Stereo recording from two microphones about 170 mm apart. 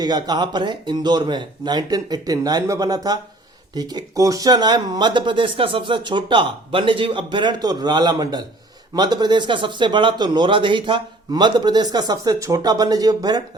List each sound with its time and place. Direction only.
0.0 s speech: 25° right (ahead or behind)